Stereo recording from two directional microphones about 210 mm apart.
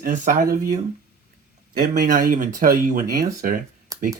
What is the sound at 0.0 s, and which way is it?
Speech, 40° right (ahead or behind).